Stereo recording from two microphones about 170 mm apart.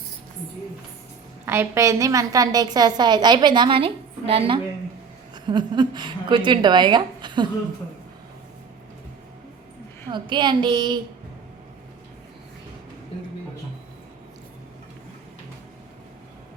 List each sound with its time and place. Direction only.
1.5 s a woman's voice: 15° right (ahead or behind)
10.1 s a woman's voice: 25° right (ahead or behind)